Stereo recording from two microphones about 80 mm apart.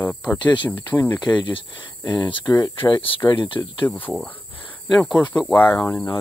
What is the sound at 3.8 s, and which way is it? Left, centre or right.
Speech, left.